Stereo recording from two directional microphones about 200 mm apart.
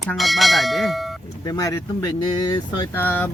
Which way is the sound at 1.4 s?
15° left (ahead or behind).